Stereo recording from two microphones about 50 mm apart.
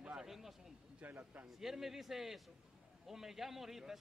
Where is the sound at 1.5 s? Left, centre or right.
Centre.